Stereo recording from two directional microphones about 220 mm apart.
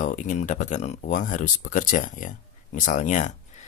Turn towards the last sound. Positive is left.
turn(degrees=35)  # may be behind; listen again after turning